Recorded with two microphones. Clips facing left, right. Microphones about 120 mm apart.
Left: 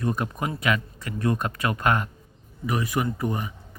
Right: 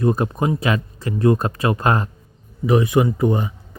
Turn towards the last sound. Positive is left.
turn(degrees=-25)  # may be behind; listen again after turning